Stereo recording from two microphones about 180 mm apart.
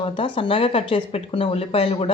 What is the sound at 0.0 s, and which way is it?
Speech, 30° left (ahead or behind).